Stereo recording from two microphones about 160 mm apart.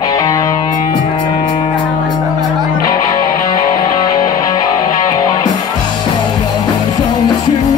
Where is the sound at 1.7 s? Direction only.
30° left (ahead or behind).